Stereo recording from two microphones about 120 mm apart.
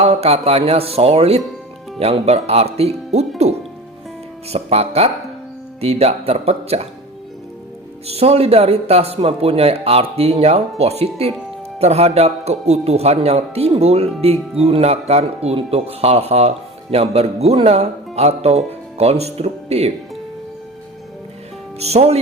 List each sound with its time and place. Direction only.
0.0 s a man's voice: 60° right (ahead or behind)
8.0 s a man's voice: 60° right (ahead or behind)
21.8 s a man's voice: 60° right (ahead or behind)